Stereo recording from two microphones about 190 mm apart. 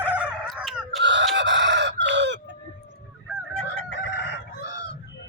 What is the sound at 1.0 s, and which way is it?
Chicken, 70° right (ahead or behind).